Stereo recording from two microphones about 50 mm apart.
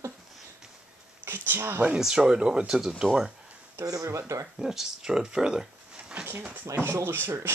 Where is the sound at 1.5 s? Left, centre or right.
Right.